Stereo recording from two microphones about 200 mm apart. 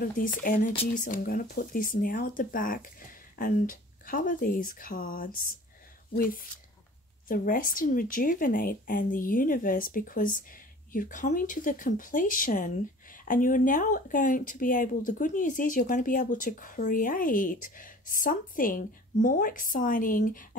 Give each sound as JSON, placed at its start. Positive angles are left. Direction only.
{"t": 0.9, "sound": "speech", "side_deg": 40}